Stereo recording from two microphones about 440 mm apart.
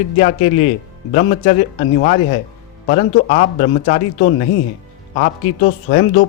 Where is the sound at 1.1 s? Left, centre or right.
Centre.